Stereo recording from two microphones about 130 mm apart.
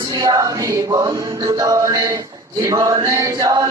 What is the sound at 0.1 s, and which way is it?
Music, 25° right (ahead or behind).